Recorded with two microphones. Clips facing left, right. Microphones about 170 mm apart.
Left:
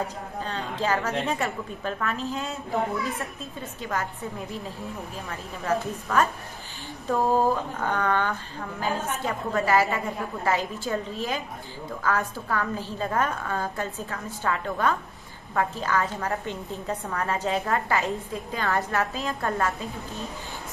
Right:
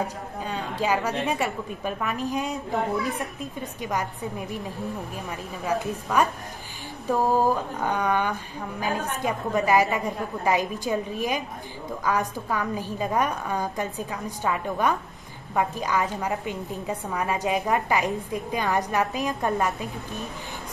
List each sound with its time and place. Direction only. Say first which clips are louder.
0.0 s a woman's voice: right 1 dB; 10° right (ahead or behind)